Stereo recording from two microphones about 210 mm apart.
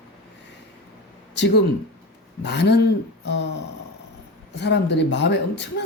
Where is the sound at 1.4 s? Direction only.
55° left (ahead or behind).